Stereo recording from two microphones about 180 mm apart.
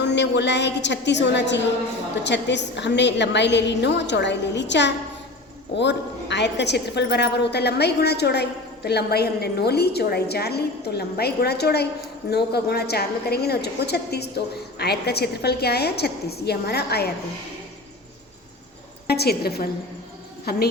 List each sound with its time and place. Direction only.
0.1 s a woman's voice: 75° left (ahead or behind)
19.0 s a woman's voice: 65° left (ahead or behind)